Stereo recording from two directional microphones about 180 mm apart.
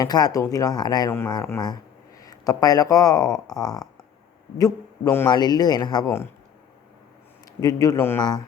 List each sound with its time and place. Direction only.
0.0 s a man's voice: 20° left (ahead or behind)
7.6 s speech: 20° left (ahead or behind)